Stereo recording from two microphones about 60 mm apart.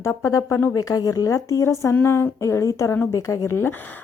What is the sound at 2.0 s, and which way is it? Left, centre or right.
Speech, left.